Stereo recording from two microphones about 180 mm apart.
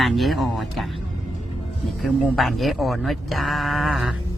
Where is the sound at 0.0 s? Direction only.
Centre (ahead or behind).